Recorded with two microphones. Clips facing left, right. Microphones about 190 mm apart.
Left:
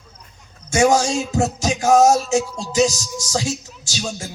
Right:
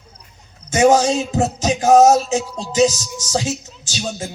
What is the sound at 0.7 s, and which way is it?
Music, 20° right (ahead or behind).